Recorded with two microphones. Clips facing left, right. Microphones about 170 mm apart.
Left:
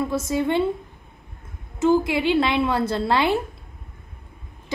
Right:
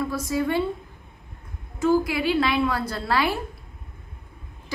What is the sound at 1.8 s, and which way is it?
A woman's voice, 25° left (ahead or behind).